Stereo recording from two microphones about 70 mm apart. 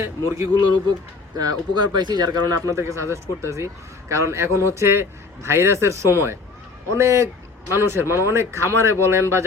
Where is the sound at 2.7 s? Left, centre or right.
Right.